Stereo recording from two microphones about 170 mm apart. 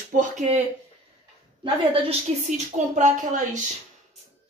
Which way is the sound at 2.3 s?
35° right (ahead or behind).